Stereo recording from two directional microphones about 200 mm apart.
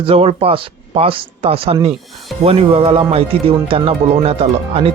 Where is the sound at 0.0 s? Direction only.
30° right (ahead or behind).